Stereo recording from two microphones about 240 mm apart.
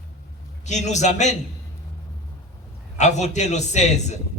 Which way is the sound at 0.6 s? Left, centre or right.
Left.